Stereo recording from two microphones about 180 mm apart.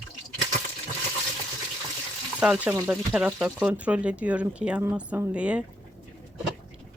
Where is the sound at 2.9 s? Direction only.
5° right (ahead or behind).